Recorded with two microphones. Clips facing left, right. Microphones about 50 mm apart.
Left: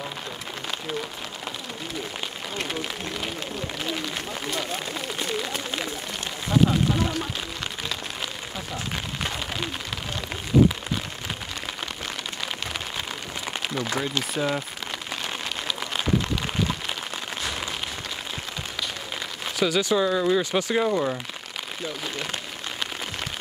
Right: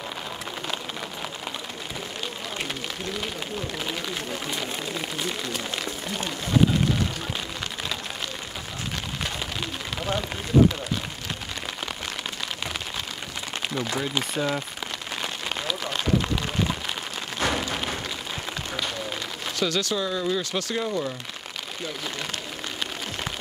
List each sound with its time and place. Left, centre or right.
4.6 s speech: centre
13.7 s speech: centre
19.6 s speech: centre